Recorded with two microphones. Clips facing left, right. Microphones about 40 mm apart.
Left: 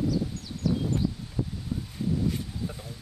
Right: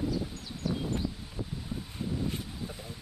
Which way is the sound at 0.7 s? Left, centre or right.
Right.